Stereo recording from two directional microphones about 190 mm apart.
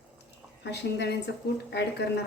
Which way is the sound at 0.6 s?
65° left (ahead or behind).